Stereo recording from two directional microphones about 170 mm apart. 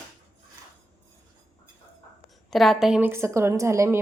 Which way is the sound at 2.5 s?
Centre (ahead or behind).